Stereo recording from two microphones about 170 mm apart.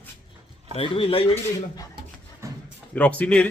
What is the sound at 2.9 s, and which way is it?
Speech, 10° left (ahead or behind).